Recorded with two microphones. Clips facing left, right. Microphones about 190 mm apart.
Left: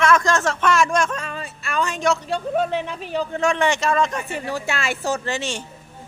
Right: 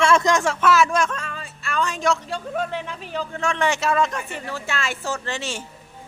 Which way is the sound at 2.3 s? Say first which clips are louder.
Left 5 dB; 15° left (ahead or behind).